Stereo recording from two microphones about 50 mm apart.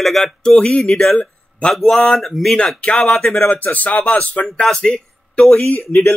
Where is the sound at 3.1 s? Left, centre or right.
Centre.